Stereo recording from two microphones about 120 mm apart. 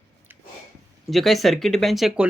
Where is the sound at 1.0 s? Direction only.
Centre (ahead or behind).